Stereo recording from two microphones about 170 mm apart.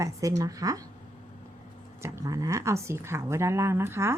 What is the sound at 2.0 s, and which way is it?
A woman's voice, 15° right (ahead or behind).